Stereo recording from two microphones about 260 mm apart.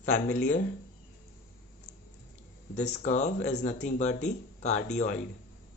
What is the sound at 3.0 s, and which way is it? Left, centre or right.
Speech, left.